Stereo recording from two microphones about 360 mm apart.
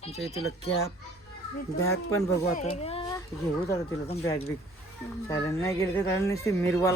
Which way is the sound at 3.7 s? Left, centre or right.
Centre.